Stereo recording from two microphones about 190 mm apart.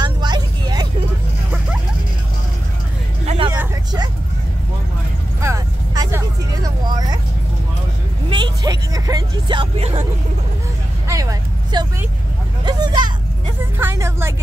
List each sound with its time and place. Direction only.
0.0 s vehicle: 25° right (ahead or behind)
3.3 s vehicle: 30° right (ahead or behind)
5.4 s vehicle: 15° right (ahead or behind)
8.3 s vehicle: 25° right (ahead or behind)
11.1 s vehicle: 15° right (ahead or behind)